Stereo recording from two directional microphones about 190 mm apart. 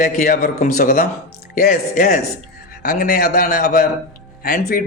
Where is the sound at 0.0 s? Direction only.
50° left (ahead or behind).